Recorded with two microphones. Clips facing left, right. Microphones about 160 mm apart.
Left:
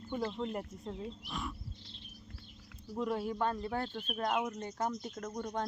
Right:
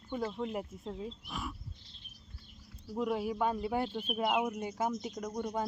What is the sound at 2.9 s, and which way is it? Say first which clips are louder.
Speech: right 2 dB; 5° right (ahead or behind).